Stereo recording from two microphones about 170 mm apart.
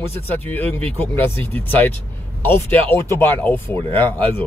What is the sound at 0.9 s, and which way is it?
Speech, 10° left (ahead or behind).